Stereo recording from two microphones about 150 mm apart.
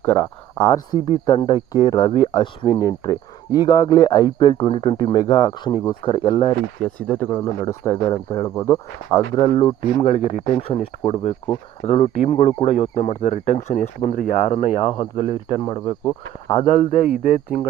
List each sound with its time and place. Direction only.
0.0 s speech: 15° left (ahead or behind)
1.3 s speech: 30° left (ahead or behind)
6.8 s speech: 10° left (ahead or behind)
9.3 s speech: 30° left (ahead or behind)
15.4 s speech: 30° left (ahead or behind)
17.0 s speech: 60° left (ahead or behind)